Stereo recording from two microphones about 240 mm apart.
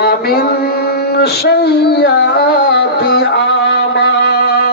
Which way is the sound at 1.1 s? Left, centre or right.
Left.